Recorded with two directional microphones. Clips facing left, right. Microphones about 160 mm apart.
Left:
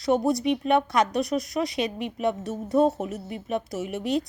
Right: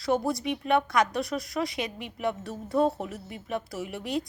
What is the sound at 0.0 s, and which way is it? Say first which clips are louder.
Speech: left 4 dB; 20° left (ahead or behind).